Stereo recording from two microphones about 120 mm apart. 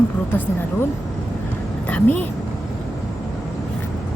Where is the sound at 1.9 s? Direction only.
15° left (ahead or behind).